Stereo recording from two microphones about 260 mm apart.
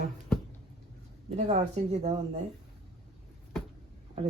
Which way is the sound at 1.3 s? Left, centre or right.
Right.